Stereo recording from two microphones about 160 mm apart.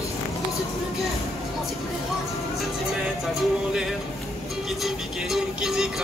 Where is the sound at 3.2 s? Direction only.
Centre (ahead or behind).